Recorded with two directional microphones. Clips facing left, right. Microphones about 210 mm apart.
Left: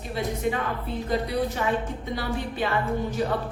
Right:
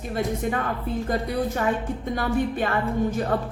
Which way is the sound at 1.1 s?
50° right (ahead or behind).